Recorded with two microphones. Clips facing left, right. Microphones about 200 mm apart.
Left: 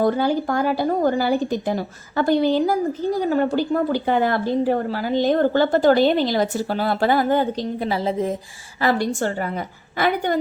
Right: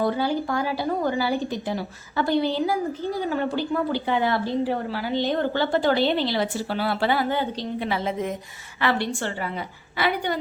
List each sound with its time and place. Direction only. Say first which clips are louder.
0.0 s a woman's voice: left 4 dB; 45° left (ahead or behind)